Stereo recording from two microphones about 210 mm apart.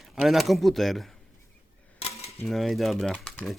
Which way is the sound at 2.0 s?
30° left (ahead or behind).